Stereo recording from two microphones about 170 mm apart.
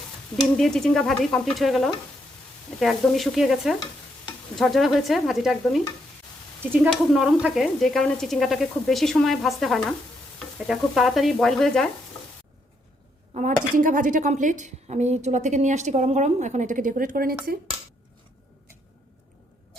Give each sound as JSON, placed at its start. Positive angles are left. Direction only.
{"t": 0.5, "sound": "speech", "side_deg": 5}
{"t": 13.7, "sound": "a woman's voice", "side_deg": -50}